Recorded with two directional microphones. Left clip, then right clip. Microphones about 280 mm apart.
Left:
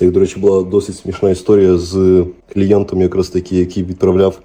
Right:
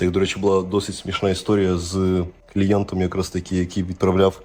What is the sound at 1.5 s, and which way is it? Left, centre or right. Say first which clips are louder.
Speech: left 10 dB; centre.